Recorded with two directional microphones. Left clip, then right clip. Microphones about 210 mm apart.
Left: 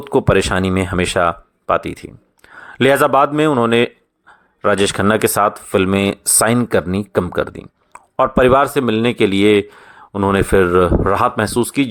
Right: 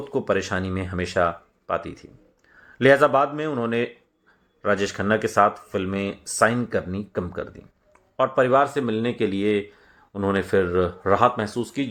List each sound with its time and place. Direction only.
0.0 s speech: 35° left (ahead or behind)